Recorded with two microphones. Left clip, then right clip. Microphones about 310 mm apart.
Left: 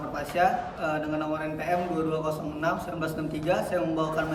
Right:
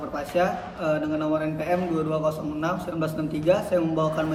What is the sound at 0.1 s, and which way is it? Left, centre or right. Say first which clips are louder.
A man's voice: even; centre.